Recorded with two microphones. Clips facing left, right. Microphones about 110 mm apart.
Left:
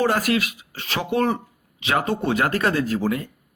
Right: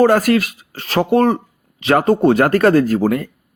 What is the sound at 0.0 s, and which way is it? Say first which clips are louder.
Speech: right 8 dB; 45° right (ahead or behind).